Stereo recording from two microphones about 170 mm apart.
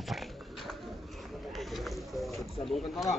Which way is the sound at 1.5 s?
Centre (ahead or behind).